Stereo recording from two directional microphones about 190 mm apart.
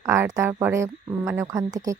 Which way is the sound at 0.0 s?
15° right (ahead or behind).